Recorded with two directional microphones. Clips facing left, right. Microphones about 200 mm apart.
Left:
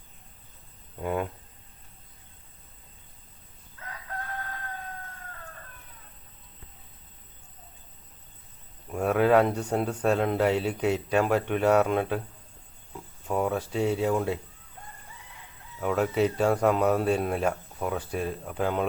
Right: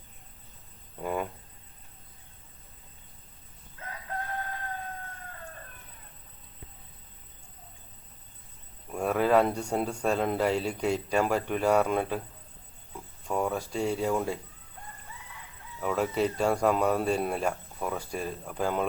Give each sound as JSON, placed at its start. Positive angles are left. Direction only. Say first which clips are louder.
{"t": 1.0, "sound": "a sound", "louder": "left 2 dB", "side_deg": 0}
{"t": 3.8, "sound": "chicken", "louder": "right 1 dB", "side_deg": -25}
{"t": 8.9, "sound": "a sound", "louder": "left 3 dB", "side_deg": 5}
{"t": 9.7, "sound": "a man's voice", "louder": "left 3 dB", "side_deg": 5}
{"t": 13.2, "sound": "a man's voice", "louder": "left 2 dB", "side_deg": 5}
{"t": 15.8, "sound": "a man's voice", "louder": "left 3 dB", "side_deg": 0}